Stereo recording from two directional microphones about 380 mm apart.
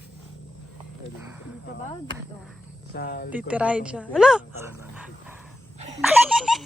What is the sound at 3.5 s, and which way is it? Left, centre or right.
Speech, centre.